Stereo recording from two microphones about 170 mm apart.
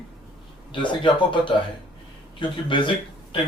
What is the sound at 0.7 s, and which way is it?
Speech, 30° left (ahead or behind).